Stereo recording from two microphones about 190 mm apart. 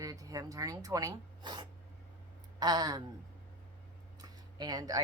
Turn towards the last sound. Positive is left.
turn(degrees=-20)  # may be behind; listen again after turning